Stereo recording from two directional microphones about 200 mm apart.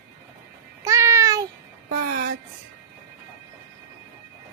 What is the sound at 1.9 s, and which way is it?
Music, 45° right (ahead or behind).